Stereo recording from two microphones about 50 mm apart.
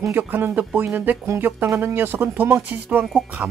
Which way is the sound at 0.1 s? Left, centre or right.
Right.